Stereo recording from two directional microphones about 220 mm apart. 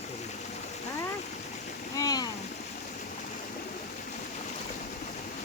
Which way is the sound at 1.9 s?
15° left (ahead or behind).